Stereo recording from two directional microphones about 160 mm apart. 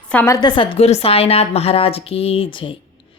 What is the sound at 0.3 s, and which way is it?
A woman's voice, 30° left (ahead or behind).